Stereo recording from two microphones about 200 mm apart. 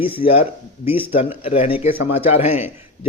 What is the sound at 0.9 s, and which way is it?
Speech, 30° left (ahead or behind).